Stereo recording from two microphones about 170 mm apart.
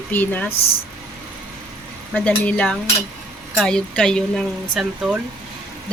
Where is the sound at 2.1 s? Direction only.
10° left (ahead or behind); by 5.2 s 5° right (ahead or behind).